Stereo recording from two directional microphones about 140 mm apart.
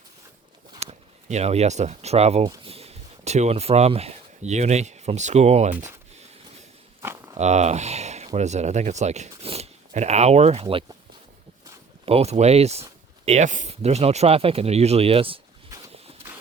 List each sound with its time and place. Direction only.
0.8 s speech: 50° right (ahead or behind)
7.0 s livestock: 20° right (ahead or behind)
7.3 s speech: 55° right (ahead or behind)
12.0 s speech: 45° right (ahead or behind)
16.2 s a sound: 15° right (ahead or behind)